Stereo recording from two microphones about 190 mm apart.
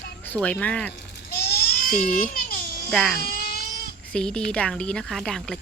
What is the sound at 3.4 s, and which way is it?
Cat, 55° left (ahead or behind).